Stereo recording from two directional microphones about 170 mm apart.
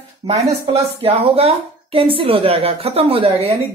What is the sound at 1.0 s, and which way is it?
A woman's voice, 35° right (ahead or behind).